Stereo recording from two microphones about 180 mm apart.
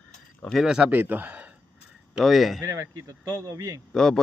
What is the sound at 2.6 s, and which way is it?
Speech, 15° right (ahead or behind).